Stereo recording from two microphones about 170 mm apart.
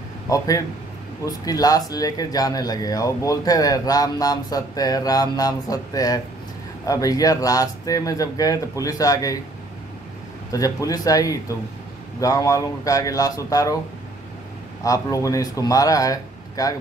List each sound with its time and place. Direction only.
0.3 s speech: 20° left (ahead or behind)
10.5 s speech: 20° left (ahead or behind)
14.8 s speech: 20° left (ahead or behind)